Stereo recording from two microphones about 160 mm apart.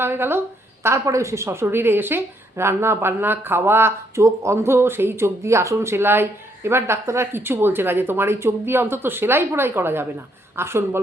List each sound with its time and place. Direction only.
0.0 s speech: 15° right (ahead or behind)